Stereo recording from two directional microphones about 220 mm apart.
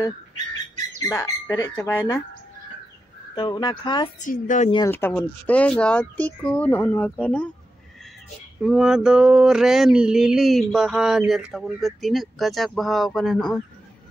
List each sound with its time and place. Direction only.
1.0 s speech: 15° left (ahead or behind)
3.3 s speech: 20° left (ahead or behind)
4.3 s a woman's voice: 35° left (ahead or behind)
4.6 s speech: 20° left (ahead or behind)
4.9 s speech: 10° left (ahead or behind)
8.6 s a sound: centre (ahead or behind)